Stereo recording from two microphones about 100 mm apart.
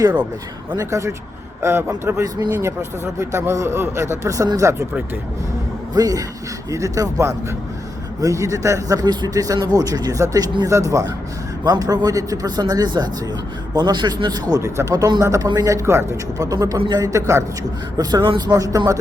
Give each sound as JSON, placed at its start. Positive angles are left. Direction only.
{"t": 0.8, "sound": "a man's voice", "side_deg": -30}
{"t": 5.9, "sound": "a man's voice", "side_deg": -40}
{"t": 10.7, "sound": "a man's voice", "side_deg": -30}
{"t": 11.6, "sound": "a man's voice", "side_deg": -40}
{"t": 14.6, "sound": "a man's voice", "side_deg": -35}
{"t": 18.2, "sound": "a man's voice", "side_deg": -50}